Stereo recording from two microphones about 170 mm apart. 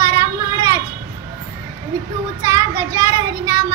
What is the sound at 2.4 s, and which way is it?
Child singing, 20° right (ahead or behind).